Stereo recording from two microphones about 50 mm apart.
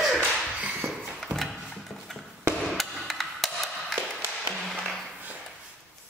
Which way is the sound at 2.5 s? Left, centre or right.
Centre.